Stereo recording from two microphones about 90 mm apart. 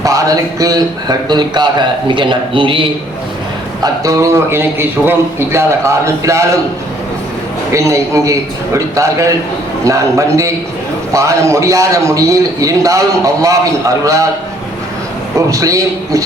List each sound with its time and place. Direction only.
0.0 s a man's voice: 40° right (ahead or behind); by 2.8 s 70° right (ahead or behind)
4.0 s a man's voice: 35° right (ahead or behind)
7.7 s a man's voice: 35° right (ahead or behind)
15.4 s a man's voice: 40° right (ahead or behind)